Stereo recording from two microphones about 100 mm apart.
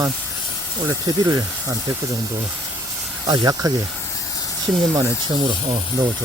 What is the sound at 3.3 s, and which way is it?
Speech, 40° right (ahead or behind).